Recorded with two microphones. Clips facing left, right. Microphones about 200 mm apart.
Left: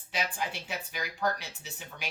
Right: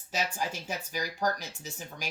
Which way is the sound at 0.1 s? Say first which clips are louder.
Right 1 dB; 40° right (ahead or behind).